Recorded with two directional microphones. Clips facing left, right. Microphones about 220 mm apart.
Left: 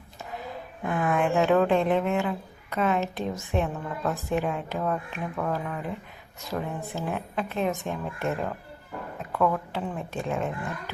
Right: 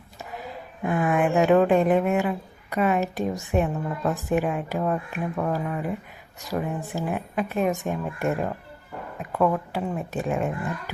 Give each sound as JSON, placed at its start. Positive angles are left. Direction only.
{"t": 0.9, "sound": "a woman's voice", "side_deg": -15}